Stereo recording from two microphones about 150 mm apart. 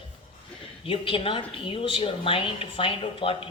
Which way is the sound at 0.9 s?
35° left (ahead or behind).